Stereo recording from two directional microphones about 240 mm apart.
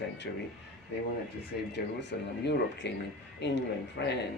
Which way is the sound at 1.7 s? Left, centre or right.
Left.